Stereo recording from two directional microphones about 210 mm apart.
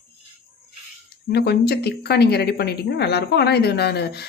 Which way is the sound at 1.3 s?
50° left (ahead or behind).